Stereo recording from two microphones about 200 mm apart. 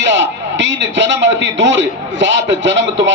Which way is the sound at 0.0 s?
65° right (ahead or behind).